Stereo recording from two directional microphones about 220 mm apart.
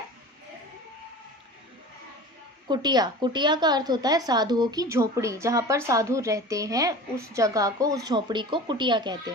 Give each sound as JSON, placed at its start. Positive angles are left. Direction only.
{"t": 2.6, "sound": "a woman's voice", "side_deg": -20}